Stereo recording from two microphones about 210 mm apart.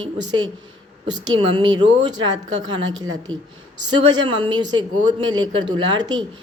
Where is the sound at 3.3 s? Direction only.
75° right (ahead or behind).